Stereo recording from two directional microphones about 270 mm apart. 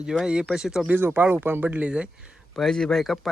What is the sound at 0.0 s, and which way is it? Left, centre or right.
Speech, centre.